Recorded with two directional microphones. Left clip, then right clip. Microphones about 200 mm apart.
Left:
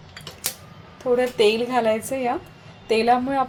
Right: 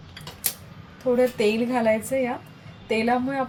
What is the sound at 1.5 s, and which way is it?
A woman's voice, 40° left (ahead or behind).